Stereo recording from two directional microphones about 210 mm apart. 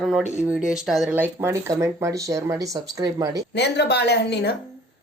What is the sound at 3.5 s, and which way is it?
A woman's voice, 55° left (ahead or behind).